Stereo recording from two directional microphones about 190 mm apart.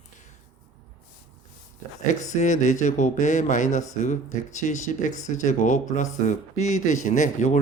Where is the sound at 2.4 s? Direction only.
40° left (ahead or behind).